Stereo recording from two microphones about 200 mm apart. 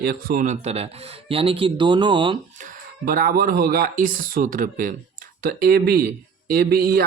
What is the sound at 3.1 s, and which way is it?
Speech, 45° right (ahead or behind).